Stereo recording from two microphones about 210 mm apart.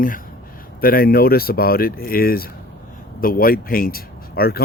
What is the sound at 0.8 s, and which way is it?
Speech, 45° left (ahead or behind).